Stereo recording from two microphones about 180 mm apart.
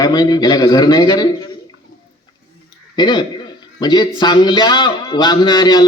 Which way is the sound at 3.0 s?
25° left (ahead or behind).